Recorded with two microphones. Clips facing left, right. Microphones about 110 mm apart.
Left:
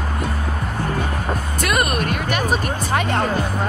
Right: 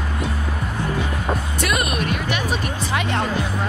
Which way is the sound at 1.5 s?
45° left (ahead or behind).